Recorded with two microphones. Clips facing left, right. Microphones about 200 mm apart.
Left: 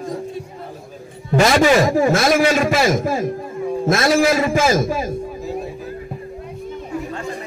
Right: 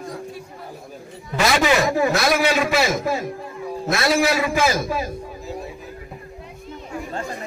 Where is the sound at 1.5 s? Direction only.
45° left (ahead or behind).